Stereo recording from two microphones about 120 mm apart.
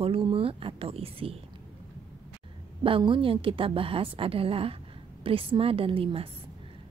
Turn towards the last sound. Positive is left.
turn(degrees=-50)  # may be behind; listen again after turning